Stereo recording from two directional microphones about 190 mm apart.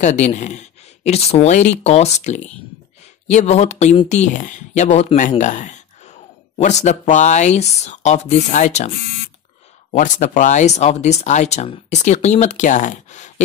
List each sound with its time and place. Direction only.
0.0 s a man's voice: 35° left (ahead or behind)